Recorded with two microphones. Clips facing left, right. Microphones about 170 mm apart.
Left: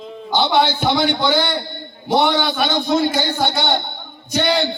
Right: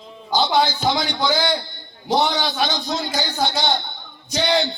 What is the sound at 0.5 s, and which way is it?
Speech, 55° left (ahead or behind).